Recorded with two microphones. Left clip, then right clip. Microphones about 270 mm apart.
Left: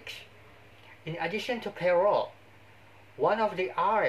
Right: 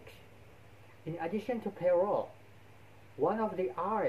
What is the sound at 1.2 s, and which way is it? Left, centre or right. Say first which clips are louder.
Speech: left 4 dB; centre.